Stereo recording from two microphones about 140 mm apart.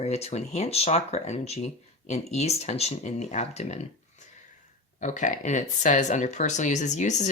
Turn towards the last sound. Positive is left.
turn(degrees=60)  # may be behind; listen again after turning